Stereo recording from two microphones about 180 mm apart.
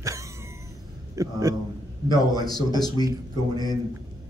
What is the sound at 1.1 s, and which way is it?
Speech, 20° right (ahead or behind).